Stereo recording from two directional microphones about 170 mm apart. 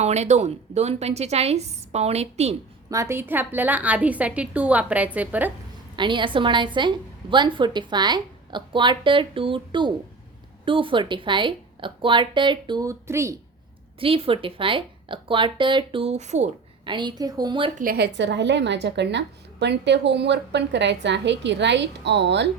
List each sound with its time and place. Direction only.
0.0 s a woman's voice: 40° right (ahead or behind)
2.9 s a woman's voice: 15° right (ahead or behind)
6.0 s a woman's voice: 30° right (ahead or behind)
14.0 s a woman's voice: 35° right (ahead or behind)
16.8 s a woman's voice: 25° right (ahead or behind)
17.7 s a woman's voice: 65° right (ahead or behind); by 22.4 s 90° right